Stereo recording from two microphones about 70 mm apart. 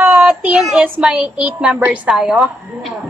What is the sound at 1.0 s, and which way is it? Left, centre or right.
A woman's voice, centre.